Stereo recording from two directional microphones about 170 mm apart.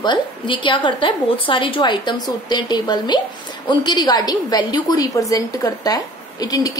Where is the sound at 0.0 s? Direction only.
25° left (ahead or behind).